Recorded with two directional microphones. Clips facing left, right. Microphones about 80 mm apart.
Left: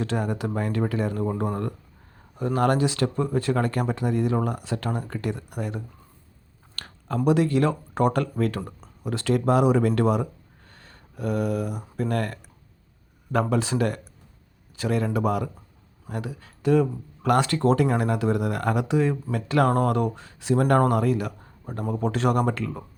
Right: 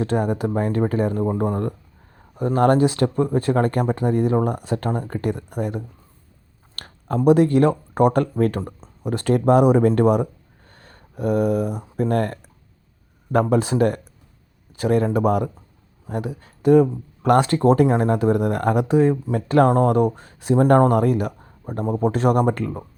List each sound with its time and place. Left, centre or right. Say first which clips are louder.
0.0 s speech: right 5 dB; right
7.3 s speech: right 6 dB; right